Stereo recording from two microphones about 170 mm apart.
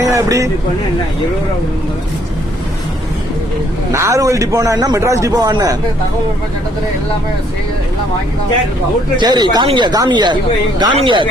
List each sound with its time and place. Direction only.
0.0 s vehicle: 20° right (ahead or behind)
3.9 s a man's voice: 15° right (ahead or behind)
9.1 s a man's voice: 25° right (ahead or behind)